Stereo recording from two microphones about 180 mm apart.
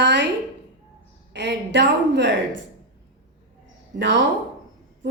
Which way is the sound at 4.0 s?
80° right.